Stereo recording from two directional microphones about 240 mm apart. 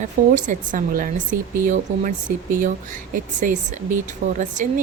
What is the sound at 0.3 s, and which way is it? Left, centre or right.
A woman's voice, right.